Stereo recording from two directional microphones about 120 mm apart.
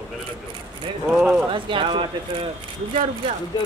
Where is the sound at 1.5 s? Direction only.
45° right (ahead or behind).